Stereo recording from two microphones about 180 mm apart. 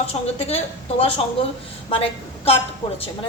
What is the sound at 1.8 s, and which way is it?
Speech, 30° left (ahead or behind).